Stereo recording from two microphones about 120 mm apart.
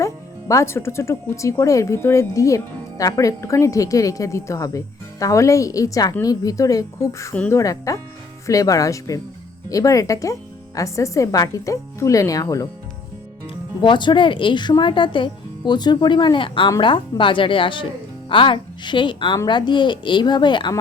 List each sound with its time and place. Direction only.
0.0 s speech: 25° left (ahead or behind)
13.5 s a woman's voice: 40° left (ahead or behind)